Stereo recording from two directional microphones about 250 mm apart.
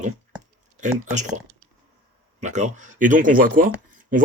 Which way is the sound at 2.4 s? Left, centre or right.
Right.